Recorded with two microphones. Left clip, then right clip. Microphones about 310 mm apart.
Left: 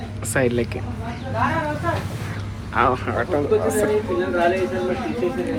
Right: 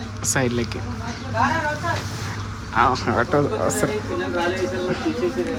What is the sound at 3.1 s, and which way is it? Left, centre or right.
Speech, right.